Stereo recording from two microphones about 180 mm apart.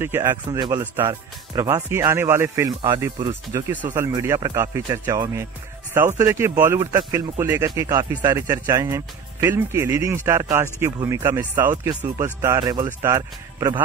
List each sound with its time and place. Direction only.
0.0 s speech: 15° right (ahead or behind)